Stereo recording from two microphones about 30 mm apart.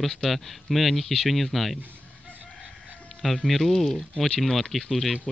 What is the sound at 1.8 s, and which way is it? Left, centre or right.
Fowl, right.